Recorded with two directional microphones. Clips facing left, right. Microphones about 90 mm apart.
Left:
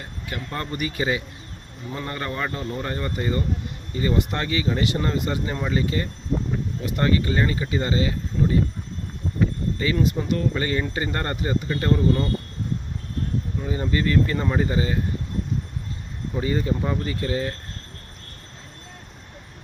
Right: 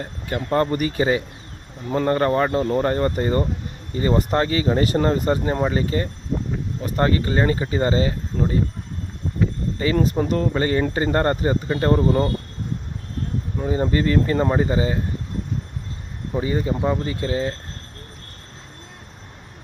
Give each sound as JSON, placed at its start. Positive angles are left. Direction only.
{"t": 0.0, "sound": "speech", "side_deg": -40}
{"t": 9.7, "sound": "speech", "side_deg": -35}
{"t": 13.6, "sound": "speech", "side_deg": -35}
{"t": 16.3, "sound": "speech", "side_deg": -20}